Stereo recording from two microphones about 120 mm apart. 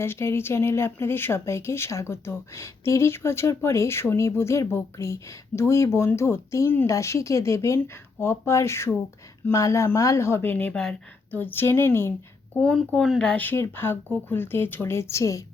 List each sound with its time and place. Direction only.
0.0 s speech: 20° left (ahead or behind)
12.5 s speech: 5° left (ahead or behind); by 15.4 s 25° left (ahead or behind)